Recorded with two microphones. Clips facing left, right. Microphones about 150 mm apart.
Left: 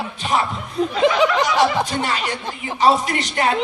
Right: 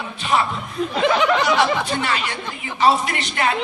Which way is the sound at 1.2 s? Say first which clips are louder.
Left 1 dB; 40° left (ahead or behind).